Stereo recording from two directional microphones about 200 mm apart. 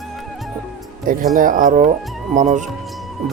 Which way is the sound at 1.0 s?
45° right (ahead or behind).